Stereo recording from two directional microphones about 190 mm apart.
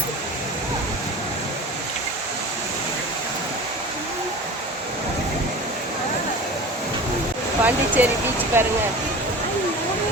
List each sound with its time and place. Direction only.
7.6 s speech: 10° right (ahead or behind)